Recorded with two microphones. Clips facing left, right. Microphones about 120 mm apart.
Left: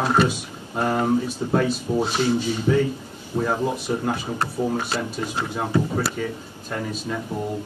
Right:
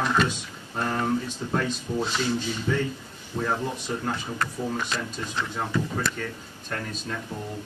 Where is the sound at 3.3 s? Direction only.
40° left (ahead or behind).